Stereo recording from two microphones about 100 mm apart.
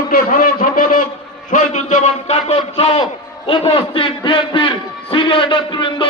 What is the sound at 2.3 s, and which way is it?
Speech, 90° left.